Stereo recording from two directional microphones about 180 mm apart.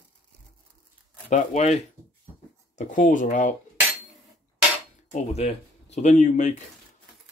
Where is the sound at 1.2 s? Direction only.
40° left (ahead or behind).